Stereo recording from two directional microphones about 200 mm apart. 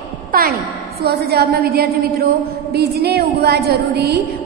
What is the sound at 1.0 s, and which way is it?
A woman's voice, 55° right (ahead or behind).